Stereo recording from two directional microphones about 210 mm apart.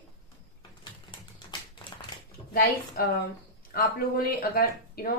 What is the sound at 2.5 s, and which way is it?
Speech, 45° left (ahead or behind).